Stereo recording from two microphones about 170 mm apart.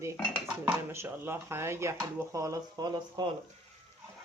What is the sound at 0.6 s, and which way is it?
Speech, 15° right (ahead or behind).